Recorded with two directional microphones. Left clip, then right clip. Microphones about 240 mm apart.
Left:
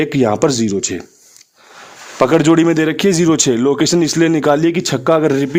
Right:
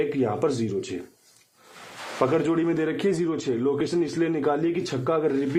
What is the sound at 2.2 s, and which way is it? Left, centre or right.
Speech, left.